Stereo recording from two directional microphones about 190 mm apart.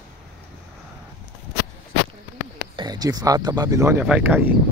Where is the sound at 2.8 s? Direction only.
20° right (ahead or behind).